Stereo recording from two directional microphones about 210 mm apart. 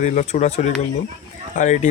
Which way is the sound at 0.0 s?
35° left (ahead or behind).